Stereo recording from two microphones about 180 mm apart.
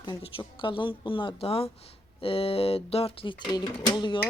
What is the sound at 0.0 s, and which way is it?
Speech, 30° left (ahead or behind).